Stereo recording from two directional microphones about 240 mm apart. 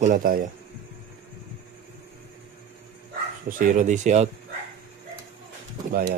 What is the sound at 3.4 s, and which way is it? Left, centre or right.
Speech, right.